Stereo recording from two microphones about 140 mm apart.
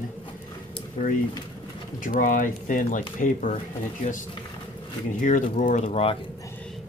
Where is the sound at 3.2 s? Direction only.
60° left (ahead or behind).